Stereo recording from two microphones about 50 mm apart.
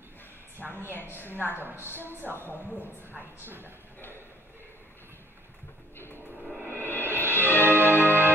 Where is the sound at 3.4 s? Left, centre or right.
Right.